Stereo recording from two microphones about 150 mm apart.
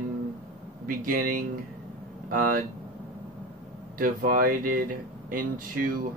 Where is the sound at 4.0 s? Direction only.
70° right (ahead or behind).